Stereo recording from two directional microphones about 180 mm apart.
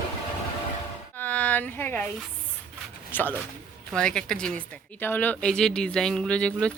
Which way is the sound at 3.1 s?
10° left (ahead or behind).